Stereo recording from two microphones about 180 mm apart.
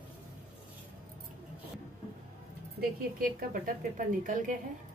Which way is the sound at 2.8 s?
50° right (ahead or behind).